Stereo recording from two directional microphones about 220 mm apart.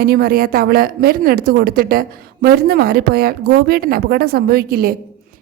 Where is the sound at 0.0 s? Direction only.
45° right (ahead or behind).